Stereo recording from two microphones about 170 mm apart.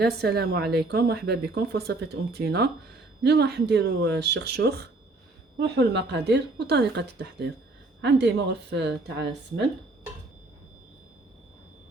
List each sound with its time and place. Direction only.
0.0 s a woman's voice: 70° right (ahead or behind); by 9.2 s 90° right